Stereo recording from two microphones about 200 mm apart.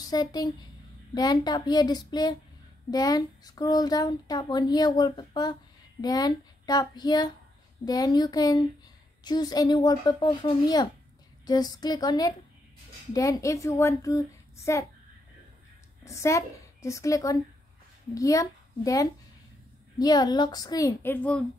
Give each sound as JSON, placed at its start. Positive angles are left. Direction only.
{"t": 0.0, "sound": "a woman's voice", "side_deg": 20}
{"t": 16.0, "sound": "a woman's voice", "side_deg": 15}